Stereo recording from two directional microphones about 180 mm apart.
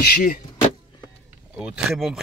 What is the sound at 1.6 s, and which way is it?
Speech, 5° right (ahead or behind).